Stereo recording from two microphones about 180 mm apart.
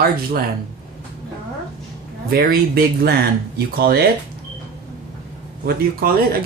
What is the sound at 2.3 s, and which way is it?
Speech, 55° right (ahead or behind).